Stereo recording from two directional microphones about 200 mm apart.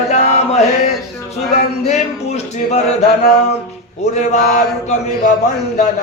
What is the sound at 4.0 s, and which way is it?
Male singing, 35° left (ahead or behind).